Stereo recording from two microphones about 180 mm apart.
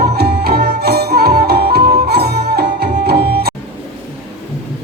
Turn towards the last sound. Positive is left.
turn(degrees=-60)  # may be behind; listen again after turning